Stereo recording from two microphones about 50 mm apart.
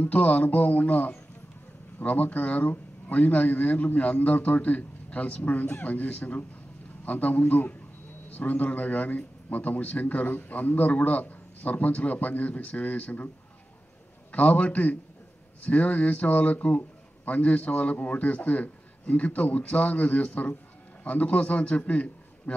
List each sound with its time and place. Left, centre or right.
0.0 s speech: left
14.3 s a man's voice: left